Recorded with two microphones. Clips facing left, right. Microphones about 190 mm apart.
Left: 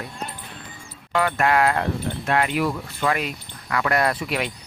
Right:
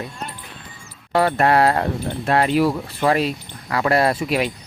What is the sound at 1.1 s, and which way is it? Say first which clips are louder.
Speech: right 4 dB; 35° right (ahead or behind).